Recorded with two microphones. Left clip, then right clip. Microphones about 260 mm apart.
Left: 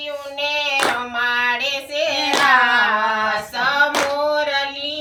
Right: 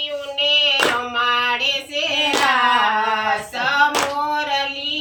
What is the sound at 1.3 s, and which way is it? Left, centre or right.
Female singing, centre.